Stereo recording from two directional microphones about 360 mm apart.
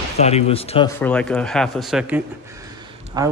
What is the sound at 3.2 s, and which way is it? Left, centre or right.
Speech, centre.